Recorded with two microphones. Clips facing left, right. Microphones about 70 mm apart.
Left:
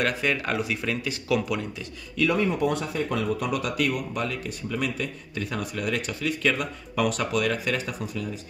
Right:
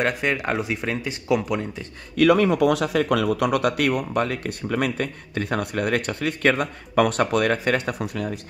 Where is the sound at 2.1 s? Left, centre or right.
Right.